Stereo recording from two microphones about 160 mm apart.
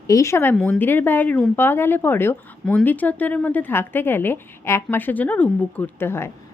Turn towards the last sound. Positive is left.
turn(degrees=15)  # may be behind; listen again after turning